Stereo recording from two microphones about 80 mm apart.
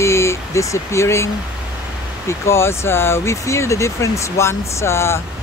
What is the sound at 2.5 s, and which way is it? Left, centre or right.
Speech, left.